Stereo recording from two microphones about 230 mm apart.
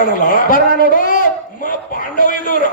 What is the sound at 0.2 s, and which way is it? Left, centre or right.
A man's voice, left.